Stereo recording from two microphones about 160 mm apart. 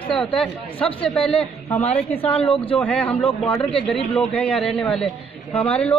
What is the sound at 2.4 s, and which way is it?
Speech, 35° left (ahead or behind).